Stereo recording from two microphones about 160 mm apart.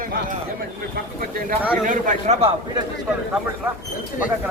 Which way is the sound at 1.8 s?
55° right (ahead or behind).